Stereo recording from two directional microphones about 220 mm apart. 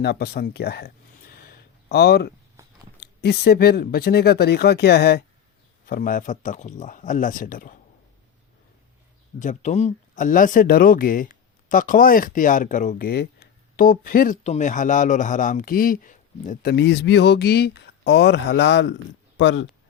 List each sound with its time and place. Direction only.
0.0 s a sound: 45° left (ahead or behind)
3.0 s speech: 50° left (ahead or behind)
9.4 s speech: 35° left (ahead or behind)
16.7 s speech: 50° left (ahead or behind)